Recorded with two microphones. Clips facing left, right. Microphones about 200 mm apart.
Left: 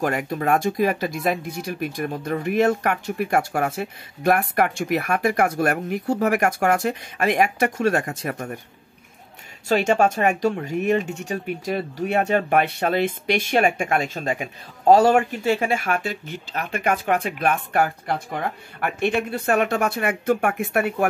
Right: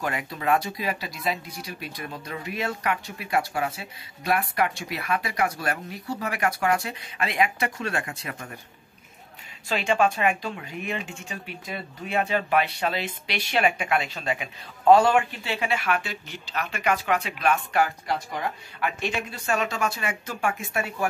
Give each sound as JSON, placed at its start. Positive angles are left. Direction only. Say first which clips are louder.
{"t": 0.0, "sound": "speech", "louder": "left 6 dB", "side_deg": 50}
{"t": 9.7, "sound": "speech", "louder": "left 5 dB", "side_deg": 45}